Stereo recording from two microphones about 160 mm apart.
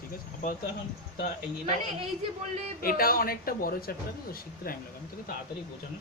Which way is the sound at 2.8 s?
65° left (ahead or behind).